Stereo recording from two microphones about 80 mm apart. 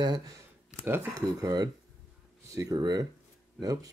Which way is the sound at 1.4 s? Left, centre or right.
Right.